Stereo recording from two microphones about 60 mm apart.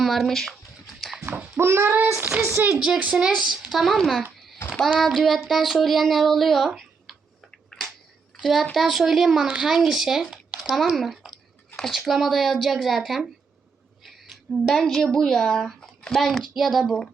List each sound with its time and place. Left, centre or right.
0.0 s speech: centre
1.5 s a child's voice: right
2.7 s speech: centre
3.7 s speech: centre
4.4 s a sound: centre
4.9 s speech: centre
7.7 s a sound: centre
8.4 s a child's voice: centre
14.0 s a sound: centre
15.0 s speech: centre